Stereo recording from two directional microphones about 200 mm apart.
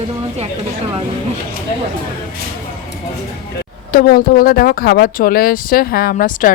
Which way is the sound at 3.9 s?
45° left (ahead or behind).